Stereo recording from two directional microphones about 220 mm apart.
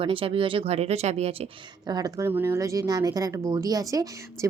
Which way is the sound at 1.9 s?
15° right (ahead or behind).